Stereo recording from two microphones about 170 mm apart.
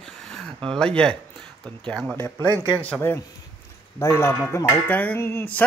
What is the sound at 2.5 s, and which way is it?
Speech, 15° right (ahead or behind).